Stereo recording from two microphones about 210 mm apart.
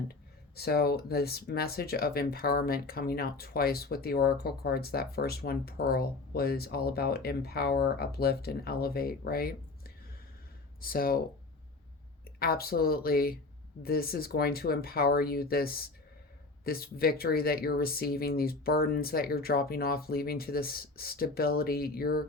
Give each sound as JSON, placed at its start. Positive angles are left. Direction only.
{"t": 0.1, "sound": "speech", "side_deg": 50}
{"t": 12.4, "sound": "speech", "side_deg": 45}